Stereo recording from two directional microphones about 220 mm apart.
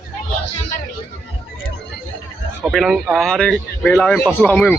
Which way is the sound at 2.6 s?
Centre (ahead or behind).